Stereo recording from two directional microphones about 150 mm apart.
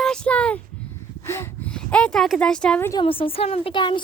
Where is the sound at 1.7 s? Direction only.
5° left (ahead or behind).